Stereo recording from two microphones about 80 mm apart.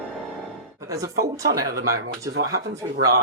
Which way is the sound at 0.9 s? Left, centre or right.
Right.